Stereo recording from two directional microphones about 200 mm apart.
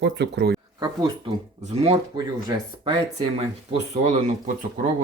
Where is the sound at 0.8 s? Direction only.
20° right (ahead or behind); by 4.5 s 35° right (ahead or behind).